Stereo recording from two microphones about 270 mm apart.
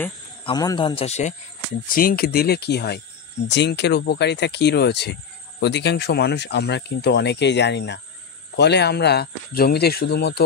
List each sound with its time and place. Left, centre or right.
0.5 s speech: centre; by 10.4 s left